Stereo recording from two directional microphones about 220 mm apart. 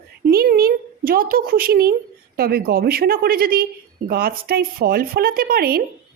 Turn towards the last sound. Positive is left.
turn(degrees=-45)  # may be behind; listen again after turning